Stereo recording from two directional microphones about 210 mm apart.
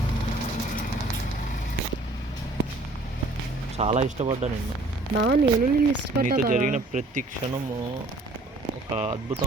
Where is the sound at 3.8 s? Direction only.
30° right (ahead or behind).